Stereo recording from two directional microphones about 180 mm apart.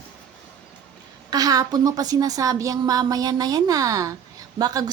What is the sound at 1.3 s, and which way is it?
Speech, 20° right (ahead or behind).